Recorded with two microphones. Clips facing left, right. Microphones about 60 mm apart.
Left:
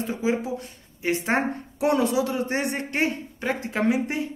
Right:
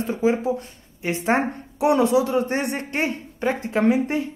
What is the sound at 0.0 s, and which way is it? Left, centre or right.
Speech, right.